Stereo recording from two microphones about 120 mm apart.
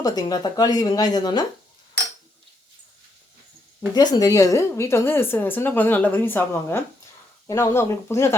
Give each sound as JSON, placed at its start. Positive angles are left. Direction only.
{"t": 0.0, "sound": "speech", "side_deg": 35}
{"t": 3.8, "sound": "a woman's voice", "side_deg": 35}